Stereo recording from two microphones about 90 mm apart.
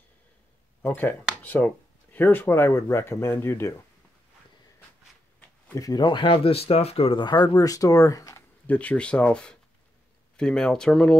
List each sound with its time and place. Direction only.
0.8 s speech: 20° left (ahead or behind)
5.8 s speech: 40° left (ahead or behind)
6.0 s speech: 65° left (ahead or behind); by 7.2 s 90° left
7.2 s speech: 50° left (ahead or behind)
8.4 s speech: 15° left (ahead or behind)